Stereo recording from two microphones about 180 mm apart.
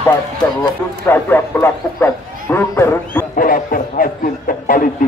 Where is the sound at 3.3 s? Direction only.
50° left (ahead or behind).